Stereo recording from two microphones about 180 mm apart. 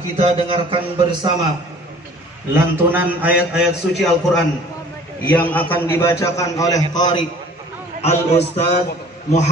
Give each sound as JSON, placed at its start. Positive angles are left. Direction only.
{"t": 0.2, "sound": "a man's voice", "side_deg": -30}
{"t": 2.5, "sound": "a man's voice", "side_deg": -10}
{"t": 8.0, "sound": "a man's voice", "side_deg": 35}